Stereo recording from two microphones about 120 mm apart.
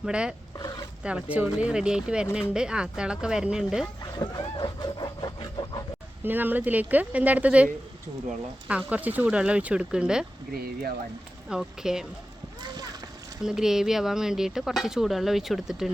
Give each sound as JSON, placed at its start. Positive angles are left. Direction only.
{"t": 0.0, "sound": "speech", "side_deg": -5}
{"t": 0.5, "sound": "a sound", "side_deg": 35}
{"t": 1.0, "sound": "speech", "side_deg": -10}
{"t": 4.0, "sound": "a sound", "side_deg": 35}
{"t": 6.2, "sound": "speech", "side_deg": -15}
{"t": 11.4, "sound": "speech", "side_deg": -5}
{"t": 12.5, "sound": "splash", "side_deg": -35}
{"t": 13.4, "sound": "speech", "side_deg": -5}